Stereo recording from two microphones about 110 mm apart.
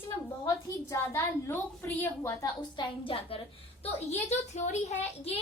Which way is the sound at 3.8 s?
90° left.